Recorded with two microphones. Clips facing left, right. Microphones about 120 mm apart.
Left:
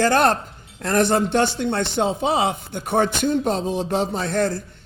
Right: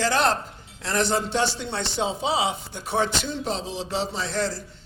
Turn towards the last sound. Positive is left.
turn(degrees=55)  # may be behind; listen again after turning